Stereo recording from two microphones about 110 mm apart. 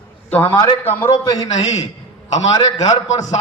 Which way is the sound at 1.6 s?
90° left.